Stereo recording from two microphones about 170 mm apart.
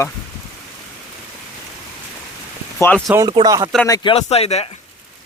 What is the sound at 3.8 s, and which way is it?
Speech, 25° left (ahead or behind).